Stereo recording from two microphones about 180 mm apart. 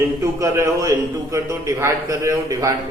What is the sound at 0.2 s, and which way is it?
A man's voice, 15° right (ahead or behind).